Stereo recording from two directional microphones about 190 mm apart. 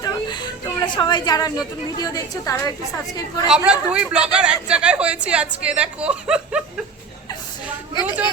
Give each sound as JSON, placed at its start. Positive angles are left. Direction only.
{"t": 0.0, "sound": "a sound", "side_deg": 25}
{"t": 1.0, "sound": "a woman's voice", "side_deg": 20}
{"t": 3.5, "sound": "speech", "side_deg": -5}